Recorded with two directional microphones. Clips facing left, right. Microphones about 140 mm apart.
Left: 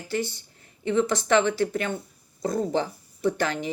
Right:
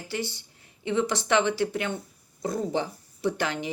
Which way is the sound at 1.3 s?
15° right (ahead or behind).